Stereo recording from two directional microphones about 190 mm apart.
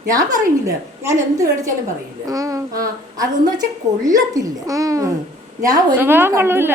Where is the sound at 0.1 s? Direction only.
20° right (ahead or behind).